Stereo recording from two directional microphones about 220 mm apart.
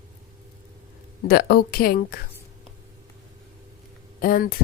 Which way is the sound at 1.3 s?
45° left (ahead or behind).